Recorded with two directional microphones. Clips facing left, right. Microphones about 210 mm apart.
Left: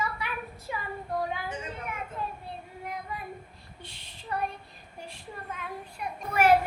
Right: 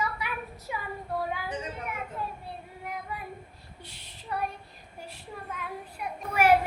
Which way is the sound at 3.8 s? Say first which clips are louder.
Left 2 dB; 10° right (ahead or behind).